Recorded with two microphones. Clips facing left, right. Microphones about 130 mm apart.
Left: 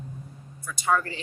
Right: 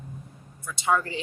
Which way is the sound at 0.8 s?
20° right (ahead or behind).